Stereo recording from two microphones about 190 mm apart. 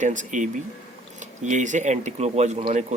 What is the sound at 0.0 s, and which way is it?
Speech, 40° right (ahead or behind).